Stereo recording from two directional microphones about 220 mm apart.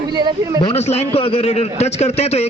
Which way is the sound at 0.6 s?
25° left (ahead or behind).